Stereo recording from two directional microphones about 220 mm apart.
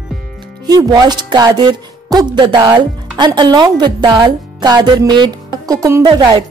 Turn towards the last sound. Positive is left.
turn(degrees=-20)  # may be behind; listen again after turning